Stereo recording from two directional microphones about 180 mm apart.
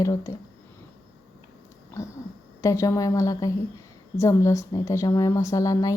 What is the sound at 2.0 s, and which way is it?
A woman's voice, 15° left (ahead or behind).